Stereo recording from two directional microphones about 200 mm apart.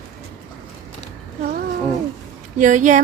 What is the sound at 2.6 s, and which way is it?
Speech, 40° right (ahead or behind).